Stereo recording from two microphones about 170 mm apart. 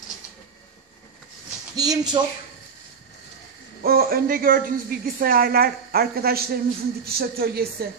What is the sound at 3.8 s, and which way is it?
A woman's voice, 60° right (ahead or behind).